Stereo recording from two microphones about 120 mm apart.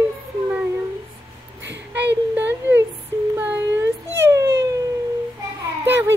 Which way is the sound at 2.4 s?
15° right (ahead or behind).